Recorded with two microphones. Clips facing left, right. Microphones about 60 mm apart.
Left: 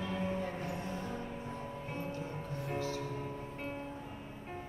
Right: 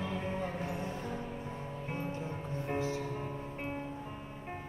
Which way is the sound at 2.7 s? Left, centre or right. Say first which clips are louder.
Right 3 dB; right.